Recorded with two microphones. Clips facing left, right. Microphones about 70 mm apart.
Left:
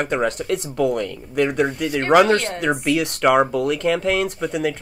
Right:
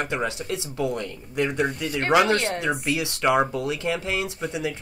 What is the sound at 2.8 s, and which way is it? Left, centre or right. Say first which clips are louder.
Speech: left 7 dB; left.